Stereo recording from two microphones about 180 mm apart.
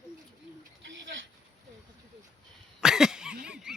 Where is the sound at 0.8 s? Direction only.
90° right.